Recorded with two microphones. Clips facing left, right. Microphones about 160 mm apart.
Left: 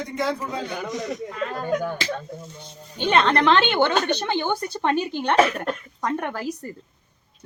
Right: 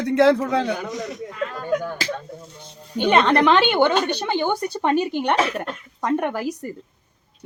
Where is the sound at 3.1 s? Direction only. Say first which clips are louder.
Right 2 dB; 15° right (ahead or behind).